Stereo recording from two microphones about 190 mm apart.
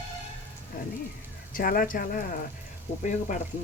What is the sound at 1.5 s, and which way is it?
Speech, 50° left (ahead or behind).